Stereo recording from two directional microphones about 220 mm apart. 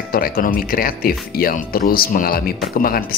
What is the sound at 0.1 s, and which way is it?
Speech, 40° left (ahead or behind).